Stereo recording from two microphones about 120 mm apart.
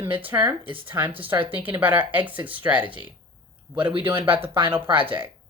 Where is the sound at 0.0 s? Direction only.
15° right (ahead or behind).